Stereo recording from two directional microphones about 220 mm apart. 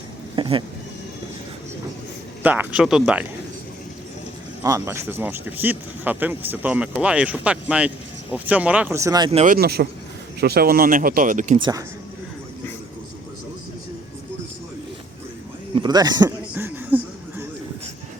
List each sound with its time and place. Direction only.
0.3 s a sound: 20° right (ahead or behind)
2.4 s speech: 5° right (ahead or behind)
4.6 s speech: 15° right (ahead or behind)
9.4 s speech: 40° right (ahead or behind)
11.6 s speech: 15° right (ahead or behind)
15.7 s a sound: 20° right (ahead or behind)